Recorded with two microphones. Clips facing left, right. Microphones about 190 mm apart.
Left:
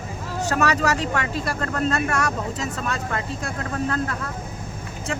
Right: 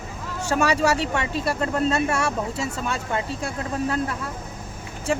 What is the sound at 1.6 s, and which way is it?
Speech, 10° right (ahead or behind).